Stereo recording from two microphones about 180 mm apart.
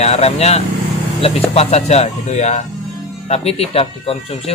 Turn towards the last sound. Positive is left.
turn(degrees=35)  # may be behind; listen again after turning